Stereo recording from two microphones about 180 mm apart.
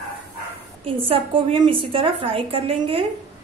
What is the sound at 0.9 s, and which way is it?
A woman's voice, 30° right (ahead or behind).